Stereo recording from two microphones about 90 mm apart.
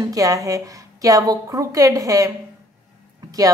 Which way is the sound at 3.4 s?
40° right (ahead or behind).